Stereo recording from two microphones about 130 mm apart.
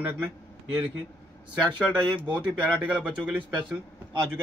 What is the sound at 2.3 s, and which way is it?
Speech, 10° right (ahead or behind).